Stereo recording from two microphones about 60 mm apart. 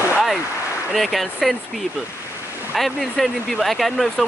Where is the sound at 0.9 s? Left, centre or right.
Centre.